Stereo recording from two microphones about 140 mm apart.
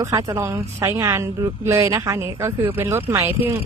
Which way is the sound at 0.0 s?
25° right (ahead or behind).